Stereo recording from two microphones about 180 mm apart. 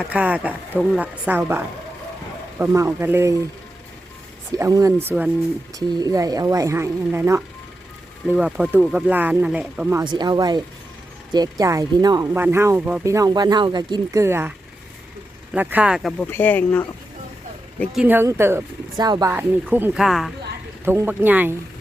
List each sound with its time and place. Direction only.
0.0 s speech: 5° right (ahead or behind)
4.5 s speech: 20° right (ahead or behind)
5.9 s speech: 20° right (ahead or behind)
10.0 s speech: 25° right (ahead or behind)
15.5 s speech: 10° right (ahead or behind)
16.2 s speech: 10° left (ahead or behind)
18.0 s speech: 10° right (ahead or behind)
20.8 s speech: 15° right (ahead or behind)